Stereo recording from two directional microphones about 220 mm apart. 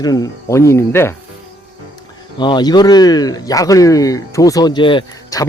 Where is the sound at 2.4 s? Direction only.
20° left (ahead or behind).